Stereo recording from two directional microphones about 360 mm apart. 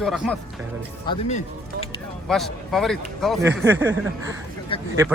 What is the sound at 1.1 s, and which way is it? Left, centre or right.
Speech, centre.